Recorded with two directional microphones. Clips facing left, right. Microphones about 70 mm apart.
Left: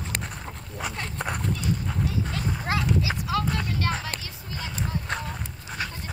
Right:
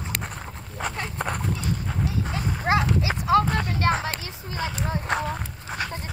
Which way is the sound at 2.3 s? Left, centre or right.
Right.